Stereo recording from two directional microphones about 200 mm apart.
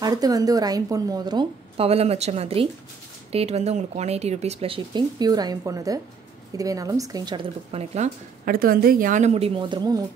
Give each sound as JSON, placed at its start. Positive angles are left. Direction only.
{"t": 0.0, "sound": "a woman's voice", "side_deg": -20}
{"t": 8.5, "sound": "a woman's voice", "side_deg": -45}